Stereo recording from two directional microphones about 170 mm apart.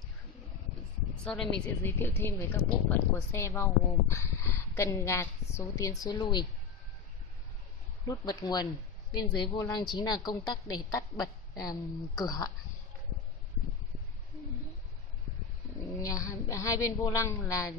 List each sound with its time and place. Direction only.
1.2 s a woman's voice: 5° left (ahead or behind)
1.8 s speech: 15° left (ahead or behind)
8.1 s a woman's voice: 20° left (ahead or behind)
15.9 s a woman's voice: 20° left (ahead or behind)